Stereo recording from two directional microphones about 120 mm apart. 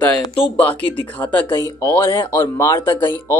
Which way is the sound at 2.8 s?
45° left (ahead or behind).